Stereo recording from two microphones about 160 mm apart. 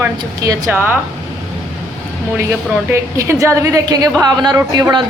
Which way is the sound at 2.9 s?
20° right (ahead or behind).